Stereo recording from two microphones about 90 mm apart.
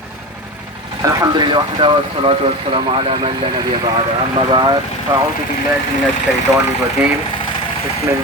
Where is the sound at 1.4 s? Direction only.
60° right (ahead or behind).